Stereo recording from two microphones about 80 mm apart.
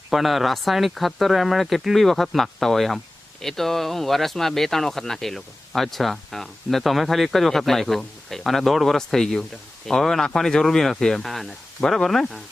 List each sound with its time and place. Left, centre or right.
0.1 s speech: centre